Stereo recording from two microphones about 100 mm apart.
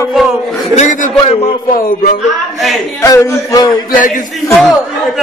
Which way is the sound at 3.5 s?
40° left (ahead or behind).